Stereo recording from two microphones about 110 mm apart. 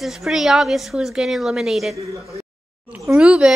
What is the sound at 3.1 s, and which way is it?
Speech, 10° right (ahead or behind).